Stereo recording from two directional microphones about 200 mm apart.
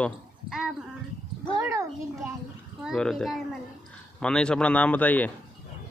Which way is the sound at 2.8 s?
Centre (ahead or behind).